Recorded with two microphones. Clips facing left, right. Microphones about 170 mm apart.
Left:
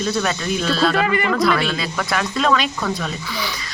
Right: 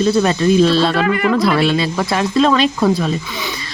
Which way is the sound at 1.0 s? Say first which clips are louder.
Right 4 dB; centre (ahead or behind).